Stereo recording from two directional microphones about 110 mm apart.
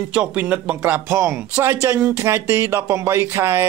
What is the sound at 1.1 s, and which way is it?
Speech, 25° right (ahead or behind).